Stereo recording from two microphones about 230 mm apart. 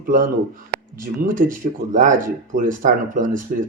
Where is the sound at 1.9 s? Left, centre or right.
Right.